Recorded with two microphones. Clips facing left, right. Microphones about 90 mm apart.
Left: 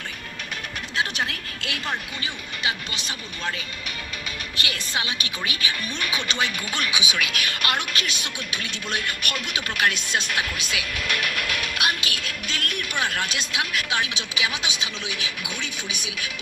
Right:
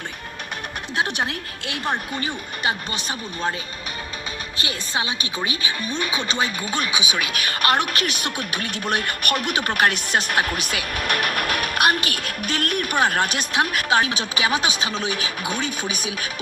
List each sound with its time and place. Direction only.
0.9 s a woman's voice: 20° right (ahead or behind)
2.1 s speech: 40° right (ahead or behind)
4.6 s speech: 30° right (ahead or behind)